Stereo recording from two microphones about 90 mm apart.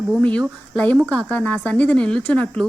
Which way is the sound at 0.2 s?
15° left (ahead or behind).